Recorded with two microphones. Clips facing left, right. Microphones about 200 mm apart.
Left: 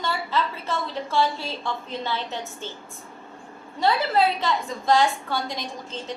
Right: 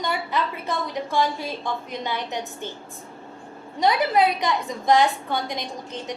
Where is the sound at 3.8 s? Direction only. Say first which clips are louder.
Right 2 dB; 15° right (ahead or behind).